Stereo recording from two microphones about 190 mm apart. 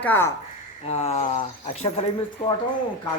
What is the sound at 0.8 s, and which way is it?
Speech, 30° left (ahead or behind).